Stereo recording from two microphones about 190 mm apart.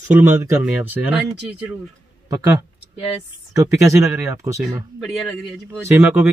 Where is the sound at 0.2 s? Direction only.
10° right (ahead or behind).